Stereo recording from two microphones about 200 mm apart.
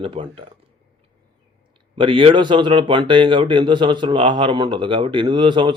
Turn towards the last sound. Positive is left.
turn(degrees=-25)  # may be behind; listen again after turning